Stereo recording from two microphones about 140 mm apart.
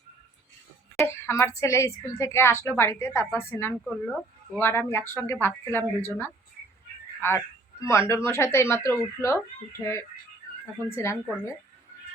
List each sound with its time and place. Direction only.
1.0 s a woman's voice: 20° left (ahead or behind)
10.8 s a woman's voice: 20° left (ahead or behind)